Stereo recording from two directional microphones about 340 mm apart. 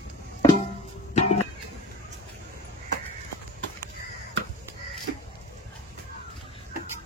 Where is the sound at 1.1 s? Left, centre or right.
Centre.